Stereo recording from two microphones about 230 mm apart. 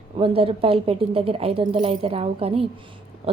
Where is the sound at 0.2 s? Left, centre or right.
Right.